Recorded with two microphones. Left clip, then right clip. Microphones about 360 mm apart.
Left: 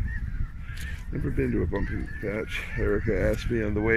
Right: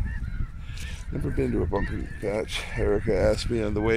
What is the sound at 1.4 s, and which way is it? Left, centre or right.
Speech, centre.